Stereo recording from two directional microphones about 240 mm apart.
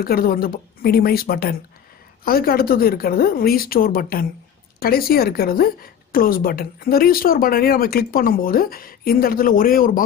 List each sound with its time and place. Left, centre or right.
0.0 s a woman's voice: left